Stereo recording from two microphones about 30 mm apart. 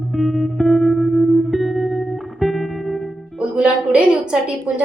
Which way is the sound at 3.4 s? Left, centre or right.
Right.